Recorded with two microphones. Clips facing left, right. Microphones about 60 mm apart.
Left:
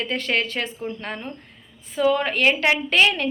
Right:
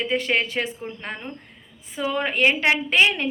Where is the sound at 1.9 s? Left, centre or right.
Right.